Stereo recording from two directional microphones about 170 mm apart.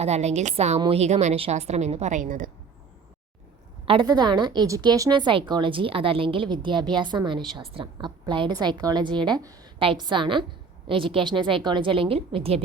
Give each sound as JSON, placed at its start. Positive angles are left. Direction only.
{"t": 0.0, "sound": "a woman's voice", "side_deg": -40}
{"t": 3.8, "sound": "a woman's voice", "side_deg": -25}